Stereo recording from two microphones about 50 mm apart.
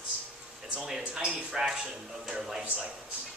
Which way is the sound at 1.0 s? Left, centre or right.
Right.